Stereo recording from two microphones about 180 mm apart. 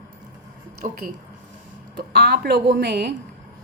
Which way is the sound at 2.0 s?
60° right (ahead or behind).